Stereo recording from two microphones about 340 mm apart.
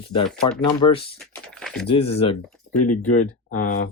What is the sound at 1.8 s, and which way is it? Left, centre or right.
Speech, centre.